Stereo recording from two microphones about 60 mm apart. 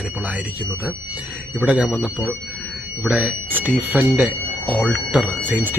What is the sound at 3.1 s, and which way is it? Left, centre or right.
Speech, right.